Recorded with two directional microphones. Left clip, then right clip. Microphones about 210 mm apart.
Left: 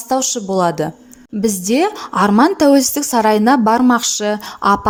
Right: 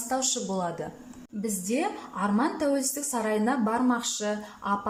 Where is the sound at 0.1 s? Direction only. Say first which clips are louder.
Left 12 dB; 35° left (ahead or behind).